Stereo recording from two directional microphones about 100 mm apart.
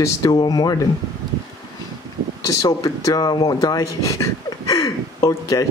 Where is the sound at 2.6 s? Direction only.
35° left (ahead or behind).